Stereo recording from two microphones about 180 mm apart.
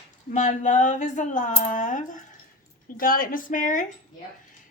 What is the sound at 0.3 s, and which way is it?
Speech, 45° left (ahead or behind).